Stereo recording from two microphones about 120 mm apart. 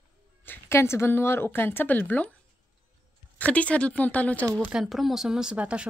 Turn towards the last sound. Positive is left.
turn(degrees=-10)  # may be behind; listen again after turning